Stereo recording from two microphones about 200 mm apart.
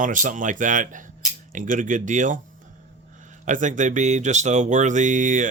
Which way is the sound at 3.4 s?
40° right (ahead or behind).